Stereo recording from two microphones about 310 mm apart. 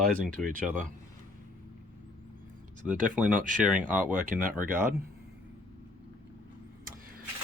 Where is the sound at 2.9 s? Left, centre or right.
Right.